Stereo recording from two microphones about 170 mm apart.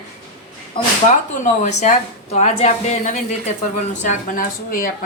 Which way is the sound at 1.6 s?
45° left (ahead or behind).